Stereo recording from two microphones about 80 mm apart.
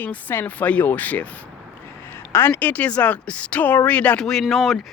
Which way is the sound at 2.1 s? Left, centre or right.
Left.